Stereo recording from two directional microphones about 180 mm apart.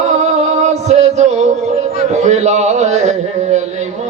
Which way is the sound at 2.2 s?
40° right (ahead or behind).